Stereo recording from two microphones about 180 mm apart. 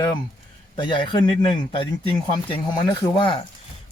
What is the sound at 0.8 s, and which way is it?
A man's voice, 25° left (ahead or behind).